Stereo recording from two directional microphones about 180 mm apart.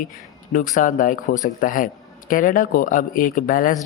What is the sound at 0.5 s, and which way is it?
Speech, 45° left (ahead or behind).